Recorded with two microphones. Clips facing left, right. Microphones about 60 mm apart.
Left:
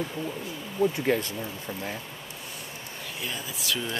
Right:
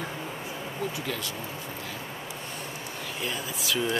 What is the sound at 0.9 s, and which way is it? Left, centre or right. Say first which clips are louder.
Speech: left 8 dB; left.